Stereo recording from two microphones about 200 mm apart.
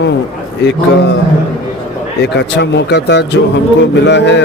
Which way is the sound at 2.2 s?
55° left (ahead or behind).